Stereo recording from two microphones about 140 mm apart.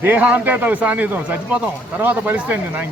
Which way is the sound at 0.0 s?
10° right (ahead or behind).